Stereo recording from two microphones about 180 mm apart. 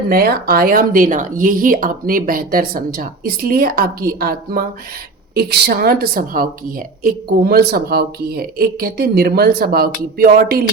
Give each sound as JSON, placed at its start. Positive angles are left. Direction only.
{"t": 0.1, "sound": "speech", "side_deg": -55}